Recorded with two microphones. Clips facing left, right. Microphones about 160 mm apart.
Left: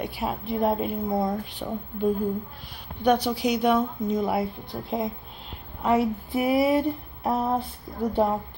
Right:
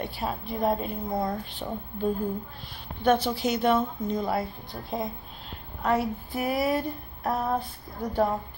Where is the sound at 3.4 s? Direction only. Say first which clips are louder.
Left 2 dB; 15° left (ahead or behind).